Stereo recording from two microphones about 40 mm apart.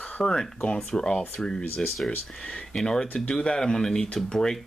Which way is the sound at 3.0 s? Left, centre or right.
Left.